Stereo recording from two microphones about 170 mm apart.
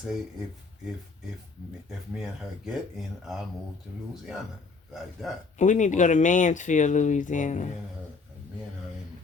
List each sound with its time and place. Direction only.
1.9 s speech: centre (ahead or behind)
4.9 s speech: centre (ahead or behind)
5.5 s speech: 45° left (ahead or behind)